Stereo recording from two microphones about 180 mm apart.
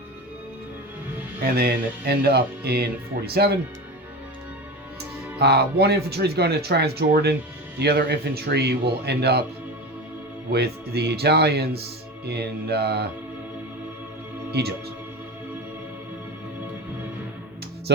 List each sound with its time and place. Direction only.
1.5 s speech: 60° right (ahead or behind)
5.4 s speech: 65° right (ahead or behind)
10.5 s speech: 65° right (ahead or behind)